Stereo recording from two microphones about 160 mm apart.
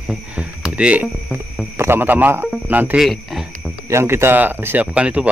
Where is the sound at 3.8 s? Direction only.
15° right (ahead or behind).